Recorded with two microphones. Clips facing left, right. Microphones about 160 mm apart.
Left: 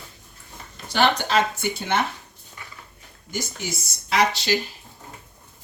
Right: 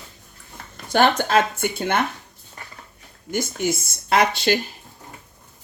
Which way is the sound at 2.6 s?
45° right (ahead or behind).